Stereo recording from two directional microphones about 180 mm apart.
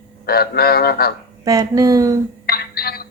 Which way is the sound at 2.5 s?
60° left (ahead or behind).